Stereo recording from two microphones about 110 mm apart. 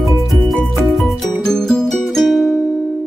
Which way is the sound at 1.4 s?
5° left (ahead or behind).